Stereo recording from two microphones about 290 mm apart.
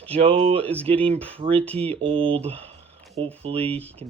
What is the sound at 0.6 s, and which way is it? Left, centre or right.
Speech, centre.